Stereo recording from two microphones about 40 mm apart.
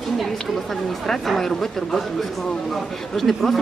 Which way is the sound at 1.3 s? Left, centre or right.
Centre.